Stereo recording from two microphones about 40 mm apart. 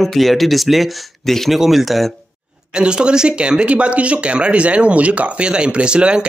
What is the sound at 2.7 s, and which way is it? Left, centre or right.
Speech, right.